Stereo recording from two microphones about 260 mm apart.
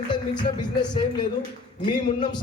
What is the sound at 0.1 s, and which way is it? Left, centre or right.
A man's voice, centre.